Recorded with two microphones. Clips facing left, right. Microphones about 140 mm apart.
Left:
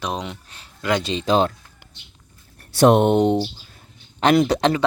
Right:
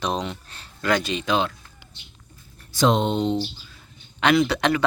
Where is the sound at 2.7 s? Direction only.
60° left (ahead or behind).